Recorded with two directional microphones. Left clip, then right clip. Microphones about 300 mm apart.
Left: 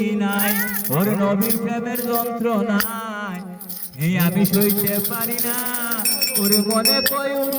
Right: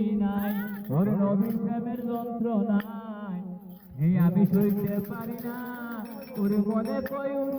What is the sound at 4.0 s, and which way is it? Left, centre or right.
Music, centre.